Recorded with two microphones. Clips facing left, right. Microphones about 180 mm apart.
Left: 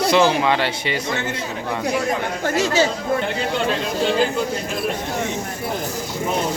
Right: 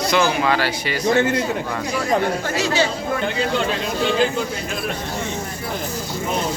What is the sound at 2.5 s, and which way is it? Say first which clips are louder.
Speech: left 2 dB; 50° left (ahead or behind).